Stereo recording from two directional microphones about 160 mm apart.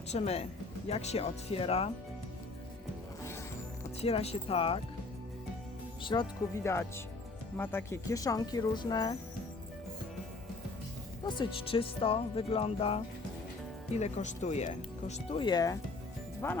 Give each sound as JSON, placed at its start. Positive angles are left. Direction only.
{"t": 0.1, "sound": "speech", "side_deg": 40}
{"t": 4.0, "sound": "speech", "side_deg": 40}
{"t": 6.0, "sound": "speech", "side_deg": 30}
{"t": 6.6, "sound": "speech", "side_deg": 15}
{"t": 11.2, "sound": "speech", "side_deg": 30}
{"t": 15.4, "sound": "speech", "side_deg": 25}